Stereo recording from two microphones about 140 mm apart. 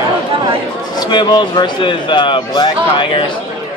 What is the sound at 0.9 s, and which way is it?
Speech, 30° left (ahead or behind).